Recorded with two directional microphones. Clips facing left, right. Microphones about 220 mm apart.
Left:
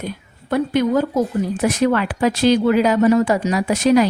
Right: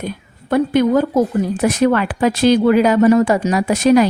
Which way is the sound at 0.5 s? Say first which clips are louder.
Right 3 dB; 50° right (ahead or behind).